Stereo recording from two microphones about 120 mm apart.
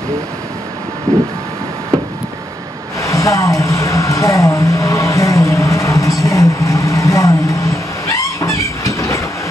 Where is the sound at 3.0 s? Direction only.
25° left (ahead or behind).